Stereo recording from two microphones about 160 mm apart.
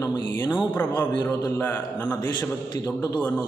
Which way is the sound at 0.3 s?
25° left (ahead or behind).